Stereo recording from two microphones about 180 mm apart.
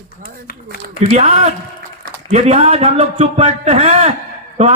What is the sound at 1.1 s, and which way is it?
A man's voice, 40° right (ahead or behind).